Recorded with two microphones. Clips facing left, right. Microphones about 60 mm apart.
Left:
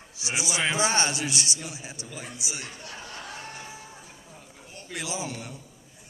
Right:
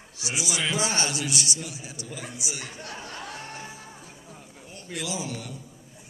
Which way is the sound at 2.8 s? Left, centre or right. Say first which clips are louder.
Right 2 dB; right.